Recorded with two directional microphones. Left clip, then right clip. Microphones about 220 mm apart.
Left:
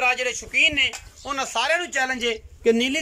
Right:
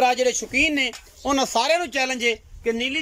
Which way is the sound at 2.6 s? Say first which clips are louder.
Left 4 dB; 25° left (ahead or behind).